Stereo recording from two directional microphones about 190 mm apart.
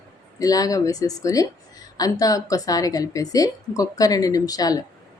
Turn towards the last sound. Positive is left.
turn(degrees=20)  # may be behind; listen again after turning